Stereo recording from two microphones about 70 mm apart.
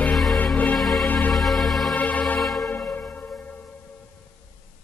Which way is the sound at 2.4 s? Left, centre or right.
Centre.